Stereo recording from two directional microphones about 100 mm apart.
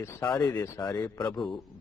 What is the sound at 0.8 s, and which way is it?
Speech, 40° left (ahead or behind).